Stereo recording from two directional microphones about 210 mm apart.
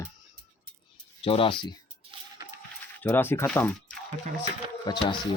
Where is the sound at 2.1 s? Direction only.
25° right (ahead or behind).